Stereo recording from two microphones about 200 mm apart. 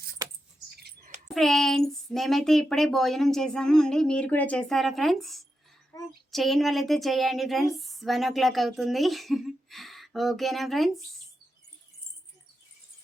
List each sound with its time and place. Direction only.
0.8 s a sound: 55° right (ahead or behind)
1.3 s a woman's voice: centre (ahead or behind)
5.9 s child singing: 15° left (ahead or behind)
6.3 s a woman's voice: centre (ahead or behind)